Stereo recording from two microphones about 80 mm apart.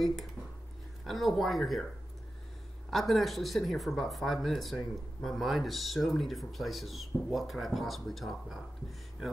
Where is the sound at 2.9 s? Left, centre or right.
Centre.